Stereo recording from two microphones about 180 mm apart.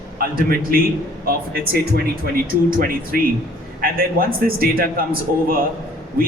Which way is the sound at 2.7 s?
50° right (ahead or behind).